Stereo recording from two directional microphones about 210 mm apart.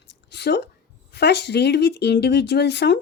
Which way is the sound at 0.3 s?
55° left (ahead or behind).